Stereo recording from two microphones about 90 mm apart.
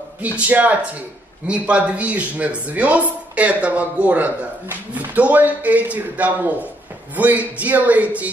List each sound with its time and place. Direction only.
0.2 s speech: 15° right (ahead or behind)